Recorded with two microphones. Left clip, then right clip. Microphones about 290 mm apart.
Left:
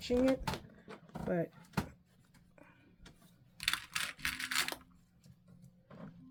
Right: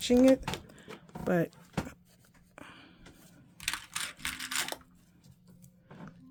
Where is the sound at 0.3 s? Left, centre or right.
Centre.